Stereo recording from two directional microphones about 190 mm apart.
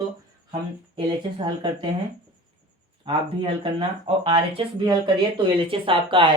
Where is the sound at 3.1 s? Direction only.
25° right (ahead or behind).